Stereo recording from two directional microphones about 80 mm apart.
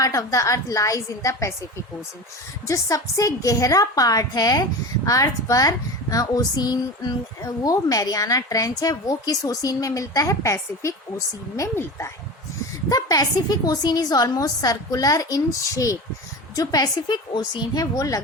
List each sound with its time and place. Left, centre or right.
0.0 s a woman's voice: left
2.6 s a woman's voice: left
12.9 s speech: left
16.6 s speech: left
17.1 s a woman's voice: left
17.9 s speech: left